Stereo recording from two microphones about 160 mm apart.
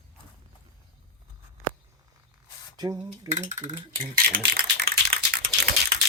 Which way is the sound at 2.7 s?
25° right (ahead or behind).